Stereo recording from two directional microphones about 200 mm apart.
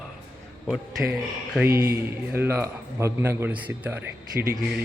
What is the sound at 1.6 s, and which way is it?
A man's voice, 15° right (ahead or behind).